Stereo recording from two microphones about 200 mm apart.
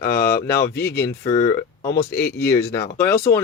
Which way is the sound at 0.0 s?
15° left (ahead or behind).